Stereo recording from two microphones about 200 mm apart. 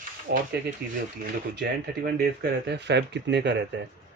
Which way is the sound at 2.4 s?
60° right (ahead or behind).